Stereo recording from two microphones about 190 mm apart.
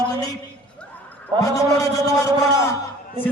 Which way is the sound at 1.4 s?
15° left (ahead or behind).